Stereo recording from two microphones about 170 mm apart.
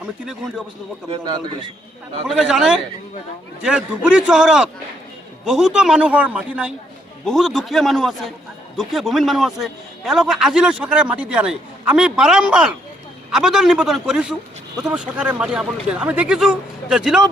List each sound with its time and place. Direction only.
0.0 s a man's voice: 5° right (ahead or behind)
1.1 s a man's voice: 25° right (ahead or behind)
2.2 s a man's voice: 5° right (ahead or behind)